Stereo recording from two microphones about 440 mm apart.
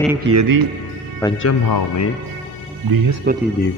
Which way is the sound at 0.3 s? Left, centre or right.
Right.